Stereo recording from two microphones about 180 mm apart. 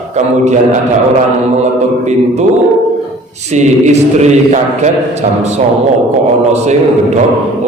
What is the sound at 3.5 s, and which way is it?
Speech, 40° right (ahead or behind).